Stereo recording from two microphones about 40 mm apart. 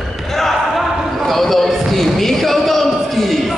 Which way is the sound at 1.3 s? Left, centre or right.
Centre.